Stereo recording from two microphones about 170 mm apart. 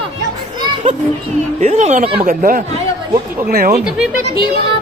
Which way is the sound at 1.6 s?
40° right (ahead or behind).